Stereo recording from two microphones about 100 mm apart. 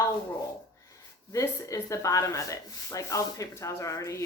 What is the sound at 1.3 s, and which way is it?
Speech, 30° left (ahead or behind).